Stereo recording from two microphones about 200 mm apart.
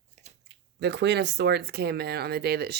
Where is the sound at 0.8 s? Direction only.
60° right (ahead or behind).